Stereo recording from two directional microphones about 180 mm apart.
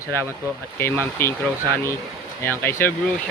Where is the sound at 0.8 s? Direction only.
15° left (ahead or behind).